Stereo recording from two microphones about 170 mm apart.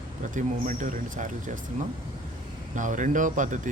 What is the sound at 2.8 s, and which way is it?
Speech, 50° right (ahead or behind).